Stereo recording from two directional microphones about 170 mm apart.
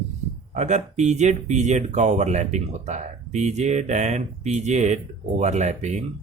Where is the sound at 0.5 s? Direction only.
45° right (ahead or behind).